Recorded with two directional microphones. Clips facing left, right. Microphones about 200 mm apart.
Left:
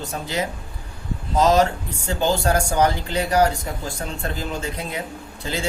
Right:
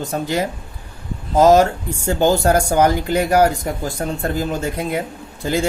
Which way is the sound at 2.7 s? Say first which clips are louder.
Right 5 dB; 55° right (ahead or behind).